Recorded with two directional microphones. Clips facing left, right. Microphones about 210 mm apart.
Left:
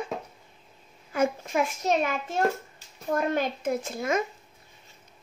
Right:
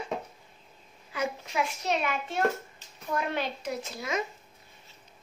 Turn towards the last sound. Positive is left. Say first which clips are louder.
# left 6 dB
turn(degrees=50)  # may be behind; listen again after turning